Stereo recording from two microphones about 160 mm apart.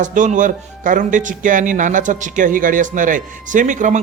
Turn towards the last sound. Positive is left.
turn(degrees=-50)  # may be behind; listen again after turning